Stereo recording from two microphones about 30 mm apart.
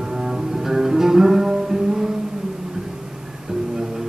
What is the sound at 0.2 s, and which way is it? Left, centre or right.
Music, centre.